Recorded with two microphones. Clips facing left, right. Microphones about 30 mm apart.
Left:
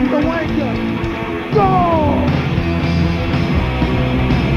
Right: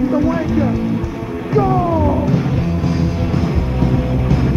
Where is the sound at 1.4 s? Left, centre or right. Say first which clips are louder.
Left 2 dB; left.